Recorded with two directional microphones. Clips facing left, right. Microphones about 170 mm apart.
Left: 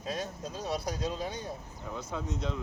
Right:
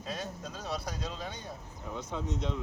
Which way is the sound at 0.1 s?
40° left (ahead or behind).